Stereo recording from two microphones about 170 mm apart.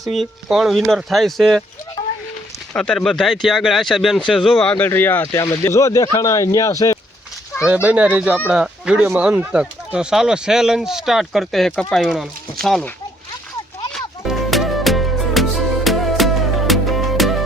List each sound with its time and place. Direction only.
0.1 s speech: centre (ahead or behind)
2.0 s a sound: 25° left (ahead or behind)
2.7 s speech: 5° left (ahead or behind)
7.7 s speech: 5° right (ahead or behind)
13.9 s music: centre (ahead or behind)